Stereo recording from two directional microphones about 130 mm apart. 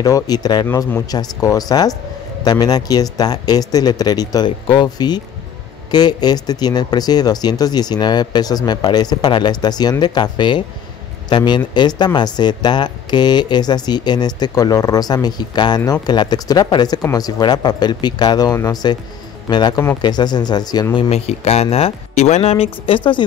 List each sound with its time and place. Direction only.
0.0 s speech: 30° left (ahead or behind)
21.1 s speech: 55° left (ahead or behind)